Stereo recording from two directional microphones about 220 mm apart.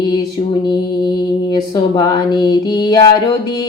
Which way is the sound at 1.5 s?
20° left (ahead or behind).